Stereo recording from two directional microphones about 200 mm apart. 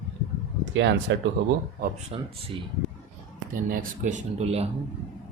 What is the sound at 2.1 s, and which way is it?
Speech, 30° right (ahead or behind).